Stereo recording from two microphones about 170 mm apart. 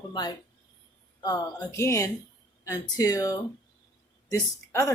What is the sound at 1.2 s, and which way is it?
Speech, 20° left (ahead or behind).